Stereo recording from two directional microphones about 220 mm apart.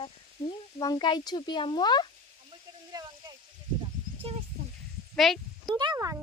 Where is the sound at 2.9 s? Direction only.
20° right (ahead or behind).